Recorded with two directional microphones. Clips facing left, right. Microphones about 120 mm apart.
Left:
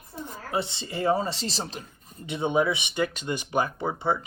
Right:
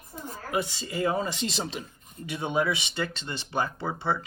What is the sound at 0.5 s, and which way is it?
Speech, 25° left (ahead or behind).